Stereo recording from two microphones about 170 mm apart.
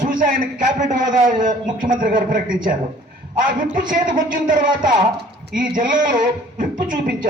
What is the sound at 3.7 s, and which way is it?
A man's voice, 55° right (ahead or behind).